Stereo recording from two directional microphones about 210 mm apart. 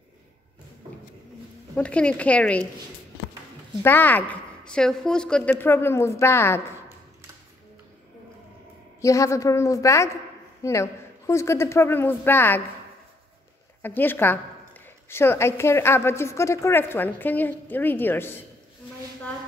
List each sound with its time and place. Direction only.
1.8 s speech: 5° left (ahead or behind)
3.8 s a woman's voice: 10° left (ahead or behind)
9.0 s a woman's voice: 15° left (ahead or behind)
13.8 s a woman's voice: 10° left (ahead or behind)